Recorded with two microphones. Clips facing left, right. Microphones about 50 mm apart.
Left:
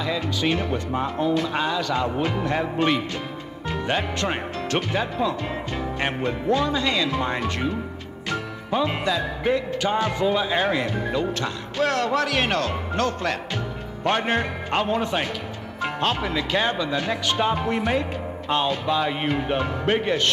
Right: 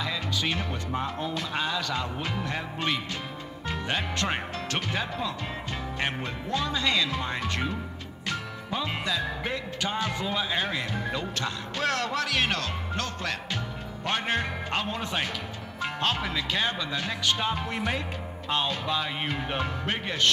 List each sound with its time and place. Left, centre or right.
0.0 s speech: left
3.6 s speech: left
5.9 s music: left
6.5 s speech: left
7.2 s speech: left
8.3 s music: left
9.7 s speech: left
10.6 s speech: left
11.7 s speech: centre
12.1 s speech: left
16.0 s speech: centre